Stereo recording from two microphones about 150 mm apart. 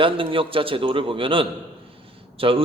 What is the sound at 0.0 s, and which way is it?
A man's voice, 35° right (ahead or behind).